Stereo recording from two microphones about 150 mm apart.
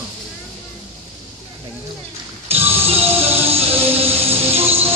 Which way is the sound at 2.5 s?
40° right (ahead or behind).